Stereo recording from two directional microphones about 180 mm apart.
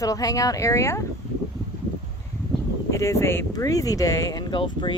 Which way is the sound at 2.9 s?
15° left (ahead or behind).